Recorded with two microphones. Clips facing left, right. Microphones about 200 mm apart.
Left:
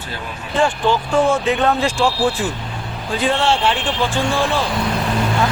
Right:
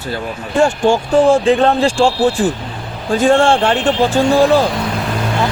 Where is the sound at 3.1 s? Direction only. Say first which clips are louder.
Right 7 dB; 45° right (ahead or behind).